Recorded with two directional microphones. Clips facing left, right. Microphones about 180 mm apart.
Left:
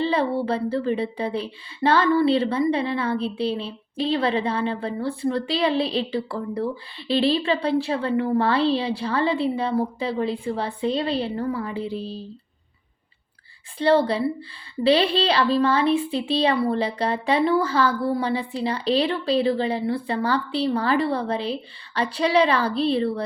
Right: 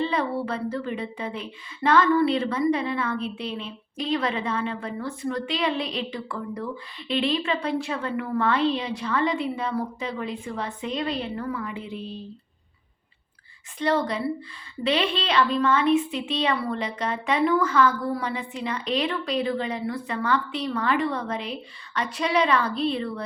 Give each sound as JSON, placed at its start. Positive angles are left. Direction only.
{"t": 0.0, "sound": "a woman's voice", "side_deg": 30}
{"t": 13.7, "sound": "a woman's voice", "side_deg": 30}